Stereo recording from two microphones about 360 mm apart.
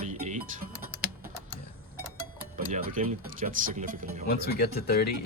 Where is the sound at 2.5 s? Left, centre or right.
Right.